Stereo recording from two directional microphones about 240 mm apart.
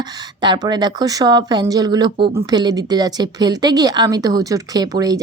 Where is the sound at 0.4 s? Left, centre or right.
Centre.